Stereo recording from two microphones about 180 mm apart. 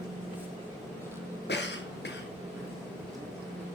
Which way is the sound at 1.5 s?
75° left (ahead or behind).